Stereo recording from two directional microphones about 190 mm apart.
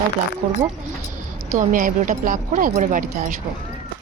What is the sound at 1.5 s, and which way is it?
Speech, 45° right (ahead or behind).